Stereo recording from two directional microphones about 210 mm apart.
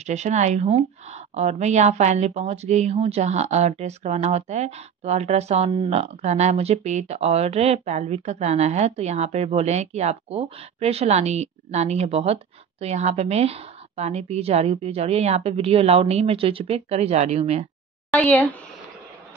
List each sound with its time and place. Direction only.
0.0 s a woman's voice: 35° right (ahead or behind)
18.3 s speech: 5° left (ahead or behind)